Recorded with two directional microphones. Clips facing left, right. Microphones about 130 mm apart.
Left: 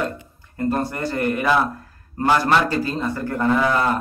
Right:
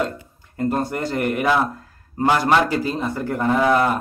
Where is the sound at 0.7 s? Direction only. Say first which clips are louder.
Even; 15° right (ahead or behind).